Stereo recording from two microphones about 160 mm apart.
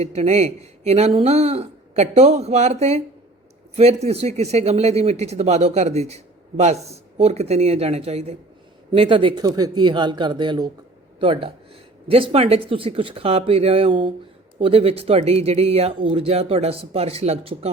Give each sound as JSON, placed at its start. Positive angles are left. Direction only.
{"t": 0.0, "sound": "speech", "side_deg": -45}